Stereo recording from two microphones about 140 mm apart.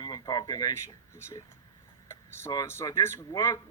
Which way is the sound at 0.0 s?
30° left (ahead or behind).